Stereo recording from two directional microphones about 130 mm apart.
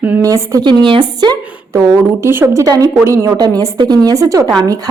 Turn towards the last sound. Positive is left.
turn(degrees=-25)  # may be behind; listen again after turning